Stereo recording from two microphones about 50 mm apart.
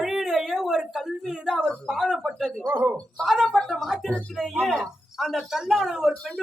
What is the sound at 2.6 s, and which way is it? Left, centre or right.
Speech, right.